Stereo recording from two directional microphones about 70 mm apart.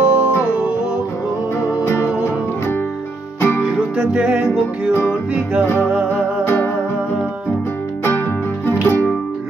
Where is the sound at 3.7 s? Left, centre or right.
Centre.